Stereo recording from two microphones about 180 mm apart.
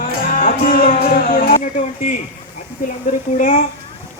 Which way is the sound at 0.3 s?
50° left (ahead or behind).